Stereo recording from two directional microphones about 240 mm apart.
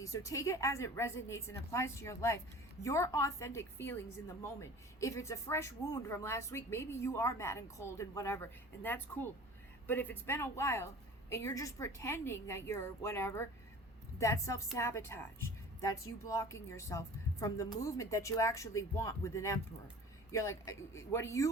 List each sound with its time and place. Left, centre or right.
0.0 s speech: centre